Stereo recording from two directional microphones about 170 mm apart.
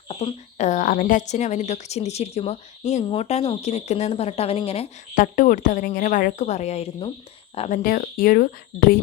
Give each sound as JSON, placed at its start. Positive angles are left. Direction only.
{"t": 0.1, "sound": "a woman's voice", "side_deg": 40}
{"t": 5.1, "sound": "a woman's voice", "side_deg": 50}
{"t": 7.7, "sound": "speech", "side_deg": 55}